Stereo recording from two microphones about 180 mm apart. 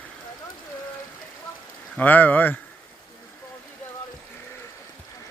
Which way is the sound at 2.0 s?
10° left (ahead or behind).